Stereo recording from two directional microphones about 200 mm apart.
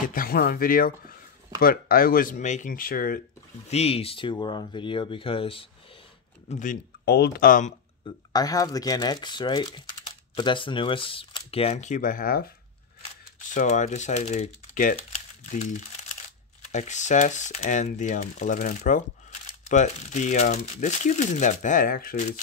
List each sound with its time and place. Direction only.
0.1 s speech: 45° left (ahead or behind)
3.6 s speech: 30° left (ahead or behind)
6.5 s speech: 40° left (ahead or behind)
8.3 s speech: 20° left (ahead or behind); by 12.4 s 45° left (ahead or behind)
13.5 s speech: 40° left (ahead or behind)
15.0 s crumpling: 35° left (ahead or behind)
16.7 s speech: 35° left (ahead or behind)